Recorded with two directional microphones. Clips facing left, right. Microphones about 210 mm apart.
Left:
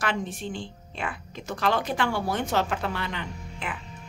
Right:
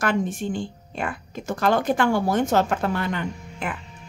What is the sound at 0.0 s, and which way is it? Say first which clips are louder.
A woman's voice: right 6 dB; 45° right (ahead or behind).